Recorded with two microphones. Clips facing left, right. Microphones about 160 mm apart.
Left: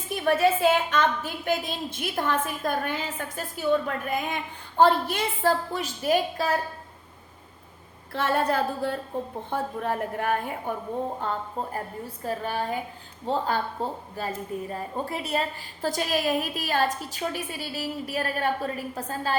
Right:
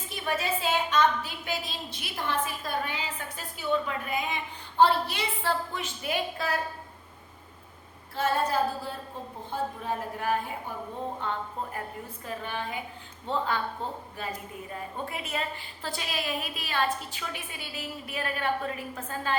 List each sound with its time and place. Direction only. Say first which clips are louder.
0.3 s a woman's voice: left 8 dB; 55° left (ahead or behind)
8.1 s a woman's voice: left 2 dB; 65° left (ahead or behind)
11.2 s a woman's voice: left 3 dB; 40° left (ahead or behind)